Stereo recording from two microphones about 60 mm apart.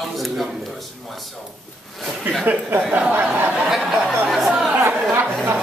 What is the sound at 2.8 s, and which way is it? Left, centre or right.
Speech, right.